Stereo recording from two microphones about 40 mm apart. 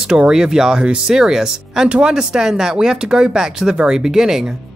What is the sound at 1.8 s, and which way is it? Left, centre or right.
Speech, right.